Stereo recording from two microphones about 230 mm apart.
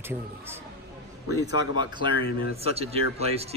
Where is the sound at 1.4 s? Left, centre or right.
Centre.